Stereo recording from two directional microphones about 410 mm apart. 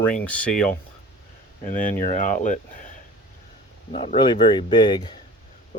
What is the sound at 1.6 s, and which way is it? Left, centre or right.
Speech, centre.